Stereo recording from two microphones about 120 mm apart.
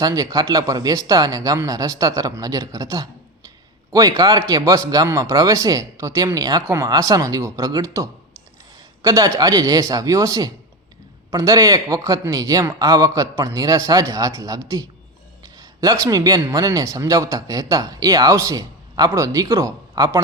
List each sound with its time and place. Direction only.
0.0 s speech: 30° right (ahead or behind)